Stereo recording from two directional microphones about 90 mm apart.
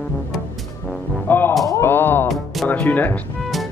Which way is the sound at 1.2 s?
25° left (ahead or behind).